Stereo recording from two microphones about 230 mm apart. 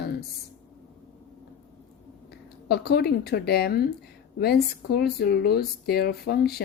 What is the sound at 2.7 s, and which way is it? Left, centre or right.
Speech, left.